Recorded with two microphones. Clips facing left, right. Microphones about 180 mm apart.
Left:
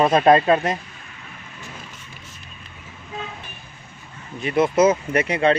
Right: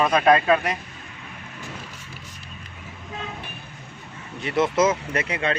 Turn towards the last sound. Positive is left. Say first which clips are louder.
# left 7 dB
turn(degrees=35)  # may be behind; listen again after turning